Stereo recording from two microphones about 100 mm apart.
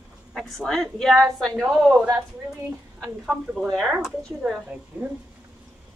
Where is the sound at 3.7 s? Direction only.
5° right (ahead or behind).